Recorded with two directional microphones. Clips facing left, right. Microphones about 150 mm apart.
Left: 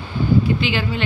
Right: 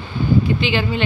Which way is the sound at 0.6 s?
5° left (ahead or behind).